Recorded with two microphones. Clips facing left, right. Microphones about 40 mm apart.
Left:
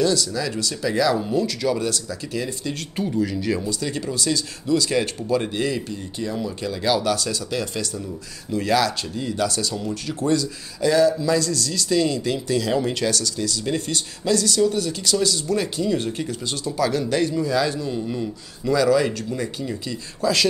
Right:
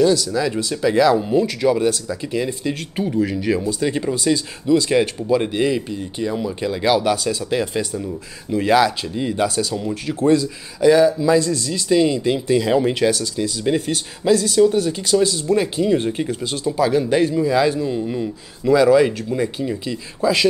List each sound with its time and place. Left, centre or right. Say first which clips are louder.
0.0 s speech: right 5 dB; centre
9.6 s speech: right 4 dB; centre